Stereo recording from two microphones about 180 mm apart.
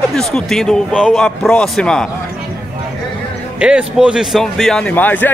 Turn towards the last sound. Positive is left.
turn(degrees=10)  # may be behind; listen again after turning